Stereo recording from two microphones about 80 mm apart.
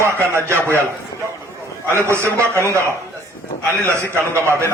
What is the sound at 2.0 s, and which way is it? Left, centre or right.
A man's voice, right.